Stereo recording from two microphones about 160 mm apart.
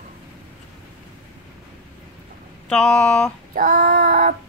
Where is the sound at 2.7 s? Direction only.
5° left (ahead or behind).